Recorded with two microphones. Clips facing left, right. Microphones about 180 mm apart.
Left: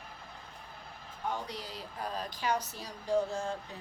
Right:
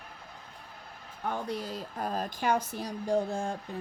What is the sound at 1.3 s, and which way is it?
Speech, 50° right (ahead or behind).